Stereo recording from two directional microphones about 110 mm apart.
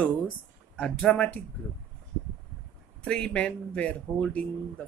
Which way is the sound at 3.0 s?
10° left (ahead or behind).